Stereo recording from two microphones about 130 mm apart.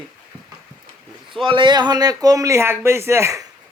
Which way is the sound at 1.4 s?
40° right (ahead or behind).